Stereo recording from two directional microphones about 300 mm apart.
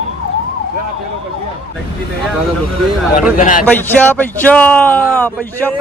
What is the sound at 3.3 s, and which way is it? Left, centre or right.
Speech, left.